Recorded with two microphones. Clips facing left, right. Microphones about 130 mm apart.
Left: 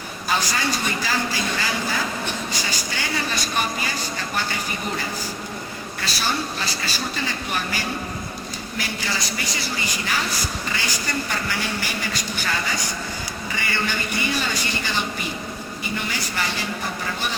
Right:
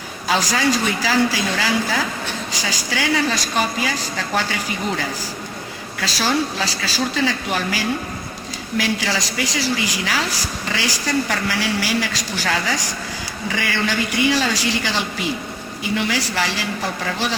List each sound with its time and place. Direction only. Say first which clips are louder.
0.3 s a woman's voice: right 5 dB; 90° right
6.0 s a woman's voice: right 6 dB; 90° right